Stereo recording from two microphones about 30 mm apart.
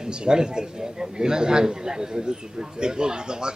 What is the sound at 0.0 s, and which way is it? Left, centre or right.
A man's voice, right.